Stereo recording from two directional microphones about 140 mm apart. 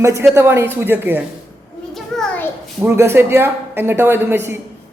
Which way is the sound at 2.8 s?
15° right (ahead or behind).